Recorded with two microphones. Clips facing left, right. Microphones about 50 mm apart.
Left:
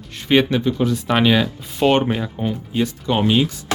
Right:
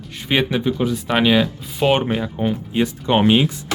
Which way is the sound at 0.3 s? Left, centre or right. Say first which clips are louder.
Left 3 dB; centre.